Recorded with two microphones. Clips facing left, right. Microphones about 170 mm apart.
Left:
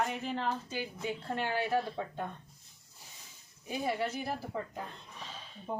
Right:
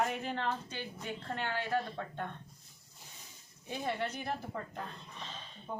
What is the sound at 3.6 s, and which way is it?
Speech, 10° left (ahead or behind).